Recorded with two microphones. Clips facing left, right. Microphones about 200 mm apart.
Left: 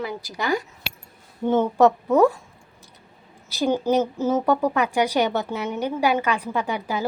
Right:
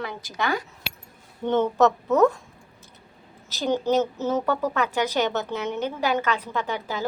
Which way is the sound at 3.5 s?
10° left (ahead or behind).